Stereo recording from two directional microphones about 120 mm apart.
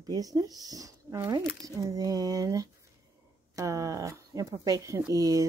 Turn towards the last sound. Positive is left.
turn(degrees=-30)  # may be behind; listen again after turning